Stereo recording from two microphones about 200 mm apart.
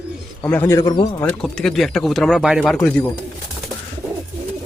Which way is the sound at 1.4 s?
Centre (ahead or behind).